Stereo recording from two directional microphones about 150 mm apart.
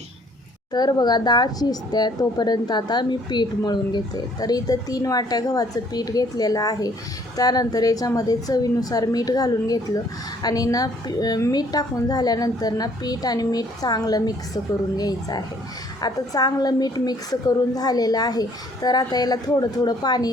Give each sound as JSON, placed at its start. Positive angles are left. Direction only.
{"t": 0.7, "sound": "speech", "side_deg": 30}